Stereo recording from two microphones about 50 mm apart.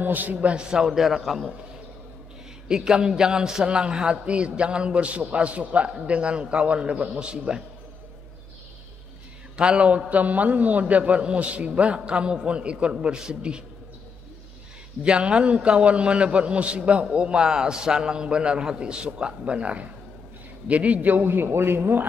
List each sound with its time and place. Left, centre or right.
0.0 s a man's voice: right; by 1.5 s centre
2.7 s a man's voice: centre
9.6 s a man's voice: right
15.0 s a man's voice: centre; by 22.0 s right